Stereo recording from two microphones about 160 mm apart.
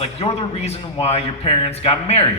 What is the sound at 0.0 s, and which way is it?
A man's voice, 40° left (ahead or behind).